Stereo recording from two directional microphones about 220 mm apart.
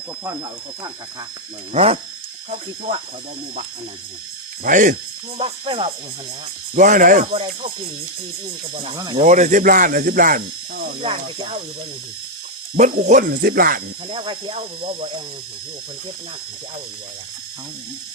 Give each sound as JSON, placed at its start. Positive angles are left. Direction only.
{"t": 1.7, "sound": "speech", "side_deg": -25}
{"t": 4.6, "sound": "speech", "side_deg": -35}
{"t": 5.4, "sound": "speech", "side_deg": -25}
{"t": 6.7, "sound": "speech", "side_deg": -35}
{"t": 8.7, "sound": "speech", "side_deg": -25}
{"t": 9.2, "sound": "speech", "side_deg": -35}
{"t": 11.0, "sound": "speech", "side_deg": -25}
{"t": 12.7, "sound": "speech", "side_deg": -35}
{"t": 14.1, "sound": "speech", "side_deg": -25}